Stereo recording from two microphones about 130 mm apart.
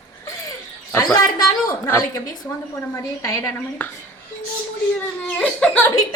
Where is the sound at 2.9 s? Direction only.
25° left (ahead or behind).